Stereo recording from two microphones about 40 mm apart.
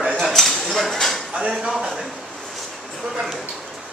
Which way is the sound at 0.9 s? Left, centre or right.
Centre.